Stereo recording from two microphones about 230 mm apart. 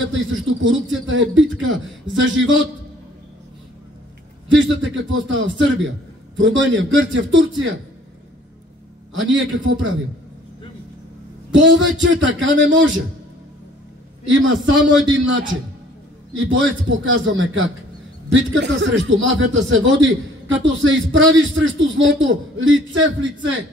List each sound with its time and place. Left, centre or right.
0.0 s a man's voice: right
4.5 s a man's voice: right
9.1 s a man's voice: right
11.5 s a man's voice: right
14.2 s a man's voice: right